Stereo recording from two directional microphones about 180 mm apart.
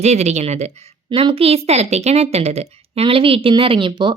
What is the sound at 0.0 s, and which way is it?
A woman's voice, 40° right (ahead or behind).